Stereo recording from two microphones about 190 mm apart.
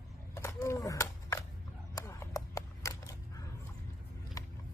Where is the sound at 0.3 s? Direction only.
15° left (ahead or behind).